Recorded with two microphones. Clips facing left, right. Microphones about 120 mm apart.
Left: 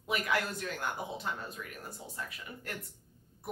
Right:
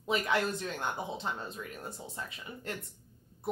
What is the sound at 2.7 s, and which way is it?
Speech, 25° right (ahead or behind).